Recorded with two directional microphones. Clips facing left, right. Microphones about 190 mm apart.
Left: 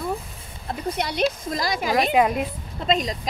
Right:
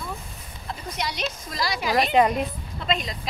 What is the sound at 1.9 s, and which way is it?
Speech, 5° left (ahead or behind).